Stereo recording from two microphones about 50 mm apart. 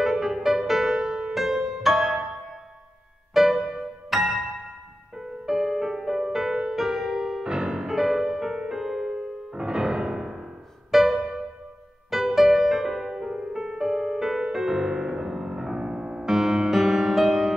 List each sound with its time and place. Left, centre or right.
0.0 s music: centre
3.6 s music: centre
7.4 s music: centre
11.1 s music: centre
12.4 s music: centre